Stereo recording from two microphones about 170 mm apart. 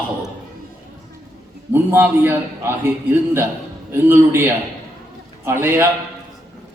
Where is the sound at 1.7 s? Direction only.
15° right (ahead or behind).